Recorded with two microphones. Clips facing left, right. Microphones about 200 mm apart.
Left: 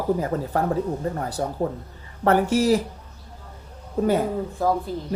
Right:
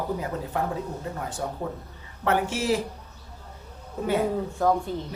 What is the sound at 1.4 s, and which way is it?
Speech, 40° left (ahead or behind).